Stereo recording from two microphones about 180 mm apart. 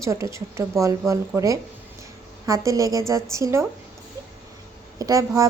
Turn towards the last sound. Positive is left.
turn(degrees=-20)  # may be behind; listen again after turning